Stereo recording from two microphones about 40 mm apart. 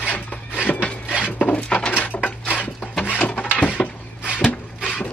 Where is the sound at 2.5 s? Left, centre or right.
Left.